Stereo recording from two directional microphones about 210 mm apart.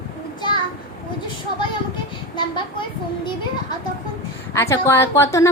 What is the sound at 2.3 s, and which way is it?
A woman's voice, 20° left (ahead or behind).